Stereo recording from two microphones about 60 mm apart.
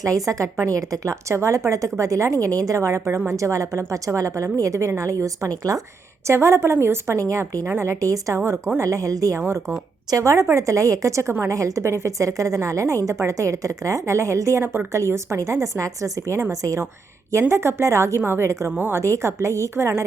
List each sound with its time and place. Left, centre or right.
0.0 s a woman's voice: right
6.2 s a woman's voice: right
7.2 s a woman's voice: right
7.6 s a woman's voice: right
11.4 s a woman's voice: right
17.5 s a woman's voice: right
18.2 s a woman's voice: right
18.9 s a woman's voice: right